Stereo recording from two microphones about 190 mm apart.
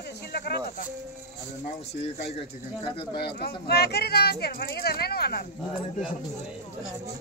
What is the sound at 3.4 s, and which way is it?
Speech, 60° left (ahead or behind).